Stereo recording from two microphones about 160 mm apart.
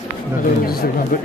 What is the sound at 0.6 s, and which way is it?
Speech, 70° left (ahead or behind).